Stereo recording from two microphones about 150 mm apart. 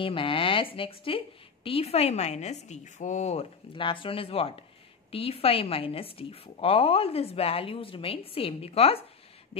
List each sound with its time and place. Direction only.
0.0 s a woman's voice: 35° left (ahead or behind)
3.7 s a woman's voice: 35° left (ahead or behind)
9.5 s a sound: 40° left (ahead or behind)